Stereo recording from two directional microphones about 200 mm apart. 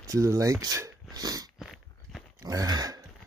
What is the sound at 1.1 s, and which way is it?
Dog, 20° right (ahead or behind).